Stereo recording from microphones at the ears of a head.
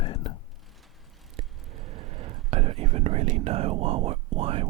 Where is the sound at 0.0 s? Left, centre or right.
Left.